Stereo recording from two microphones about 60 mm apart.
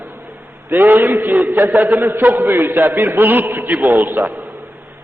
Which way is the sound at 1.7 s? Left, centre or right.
Centre.